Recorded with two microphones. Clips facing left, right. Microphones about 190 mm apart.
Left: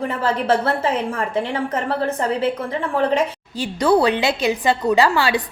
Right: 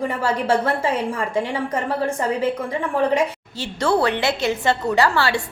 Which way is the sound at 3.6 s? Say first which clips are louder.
Left 3 dB; 15° left (ahead or behind).